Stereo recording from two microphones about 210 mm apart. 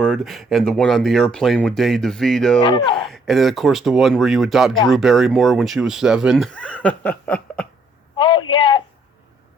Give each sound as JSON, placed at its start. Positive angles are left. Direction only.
{"t": 0.0, "sound": "speech", "side_deg": 0}
{"t": 2.6, "sound": "speech", "side_deg": 20}
{"t": 3.1, "sound": "speech", "side_deg": 0}
{"t": 8.1, "sound": "a sound", "side_deg": 20}